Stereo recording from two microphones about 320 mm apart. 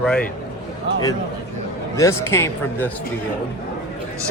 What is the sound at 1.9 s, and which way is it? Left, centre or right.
Speech, centre.